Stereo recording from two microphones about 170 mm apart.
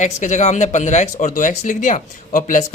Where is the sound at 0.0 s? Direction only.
45° left (ahead or behind).